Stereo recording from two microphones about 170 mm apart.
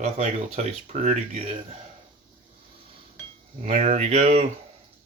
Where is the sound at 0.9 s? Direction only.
45° right (ahead or behind).